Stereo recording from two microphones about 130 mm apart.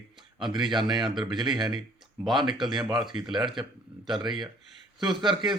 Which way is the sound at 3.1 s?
60° left (ahead or behind).